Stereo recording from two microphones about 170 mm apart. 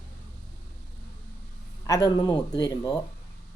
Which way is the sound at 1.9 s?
20° left (ahead or behind).